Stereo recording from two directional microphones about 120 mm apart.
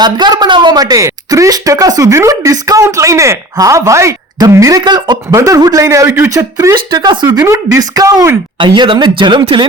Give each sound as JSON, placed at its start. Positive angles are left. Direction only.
{"t": 0.0, "sound": "speech", "side_deg": -35}
{"t": 5.3, "sound": "speech", "side_deg": -25}
{"t": 6.7, "sound": "speech", "side_deg": -40}
{"t": 7.4, "sound": "speech", "side_deg": -25}
{"t": 8.5, "sound": "speech", "side_deg": -40}